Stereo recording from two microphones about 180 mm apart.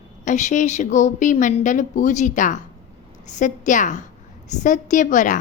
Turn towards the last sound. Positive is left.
turn(degrees=45)  # may be behind; listen again after turning